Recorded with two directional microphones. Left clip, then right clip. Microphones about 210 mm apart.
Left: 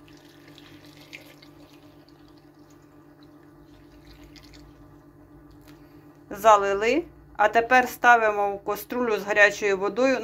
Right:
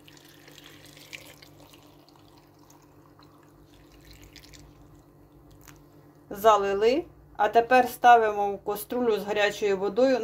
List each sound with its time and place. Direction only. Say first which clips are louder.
6.2 s a woman's voice: left 3 dB; 10° right (ahead or behind)